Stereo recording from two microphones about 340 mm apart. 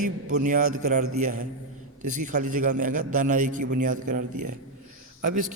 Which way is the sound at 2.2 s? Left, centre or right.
Right.